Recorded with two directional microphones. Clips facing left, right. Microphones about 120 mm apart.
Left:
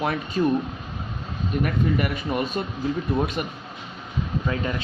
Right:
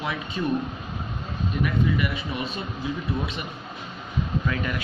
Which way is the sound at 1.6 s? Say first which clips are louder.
Left 1 dB; 45° left (ahead or behind).